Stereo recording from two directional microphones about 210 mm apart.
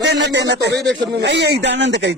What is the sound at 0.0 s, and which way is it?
Speech, 55° right (ahead or behind).